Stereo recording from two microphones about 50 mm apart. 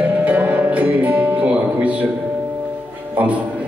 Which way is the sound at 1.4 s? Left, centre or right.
Right.